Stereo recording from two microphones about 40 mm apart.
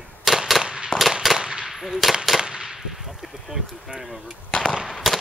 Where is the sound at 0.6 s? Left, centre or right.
Centre.